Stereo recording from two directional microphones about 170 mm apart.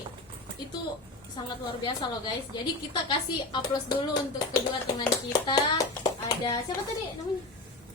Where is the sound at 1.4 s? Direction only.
25° left (ahead or behind).